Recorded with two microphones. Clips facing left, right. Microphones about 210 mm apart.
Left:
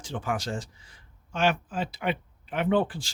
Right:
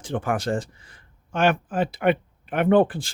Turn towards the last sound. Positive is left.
turn(degrees=-55)  # may be behind; listen again after turning